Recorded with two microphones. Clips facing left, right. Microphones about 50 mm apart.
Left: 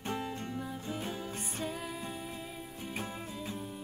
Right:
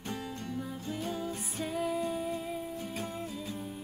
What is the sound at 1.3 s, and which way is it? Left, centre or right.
Music, centre.